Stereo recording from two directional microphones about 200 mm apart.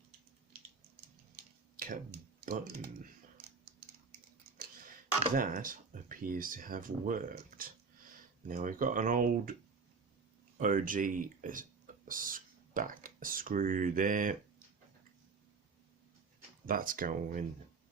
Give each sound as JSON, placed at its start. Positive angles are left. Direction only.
{"t": 1.7, "sound": "a sound", "side_deg": -45}
{"t": 2.4, "sound": "speech", "side_deg": -45}
{"t": 4.5, "sound": "a sound", "side_deg": -50}
{"t": 5.3, "sound": "speech", "side_deg": -40}
{"t": 10.6, "sound": "speech", "side_deg": -40}
{"t": 16.6, "sound": "speech", "side_deg": -45}